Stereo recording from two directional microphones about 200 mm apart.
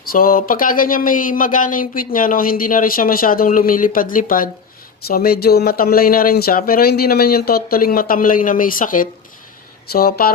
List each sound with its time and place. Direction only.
0.0 s speech: 45° left (ahead or behind)